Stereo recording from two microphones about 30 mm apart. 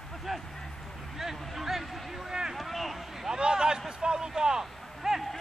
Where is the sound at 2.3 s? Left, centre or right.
Centre.